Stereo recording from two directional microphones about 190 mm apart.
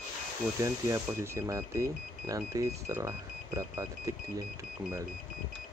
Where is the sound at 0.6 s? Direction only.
15° right (ahead or behind).